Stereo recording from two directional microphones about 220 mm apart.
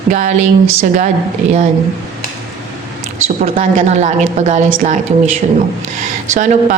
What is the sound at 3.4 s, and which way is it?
A man's voice, 40° right (ahead or behind).